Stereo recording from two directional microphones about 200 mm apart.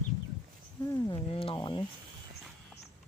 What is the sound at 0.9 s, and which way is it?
Speech, 20° left (ahead or behind).